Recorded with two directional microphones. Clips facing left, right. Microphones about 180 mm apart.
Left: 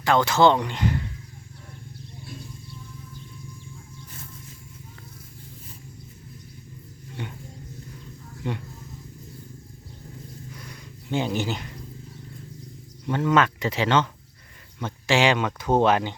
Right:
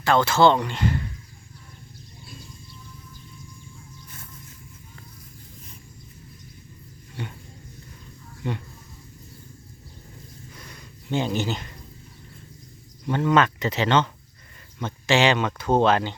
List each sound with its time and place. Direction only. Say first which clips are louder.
0.0 s speech: even; 15° left (ahead or behind)
10.6 s a sound: left 2 dB; 10° left (ahead or behind)
13.1 s speech: right 1 dB; 5° left (ahead or behind)